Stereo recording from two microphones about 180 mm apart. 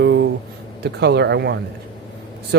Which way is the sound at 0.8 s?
65° right (ahead or behind).